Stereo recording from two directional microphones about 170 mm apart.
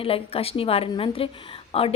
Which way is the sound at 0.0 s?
35° left (ahead or behind).